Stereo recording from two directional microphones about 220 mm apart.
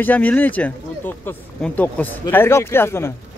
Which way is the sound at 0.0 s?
5° left (ahead or behind).